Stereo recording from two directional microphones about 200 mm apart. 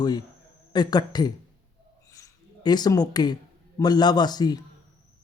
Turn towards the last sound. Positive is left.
turn(degrees=20)  # may be behind; listen again after turning